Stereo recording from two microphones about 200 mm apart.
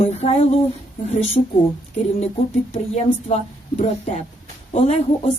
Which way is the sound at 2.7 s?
30° left (ahead or behind).